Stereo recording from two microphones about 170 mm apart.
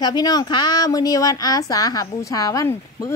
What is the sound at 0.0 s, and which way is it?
A woman's voice, 25° left (ahead or behind).